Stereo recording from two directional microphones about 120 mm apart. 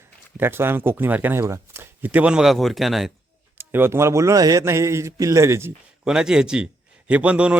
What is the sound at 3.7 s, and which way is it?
A man's voice, 20° right (ahead or behind).